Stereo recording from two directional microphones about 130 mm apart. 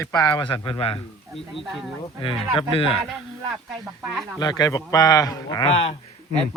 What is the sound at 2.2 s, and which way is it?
Speech, 40° left (ahead or behind).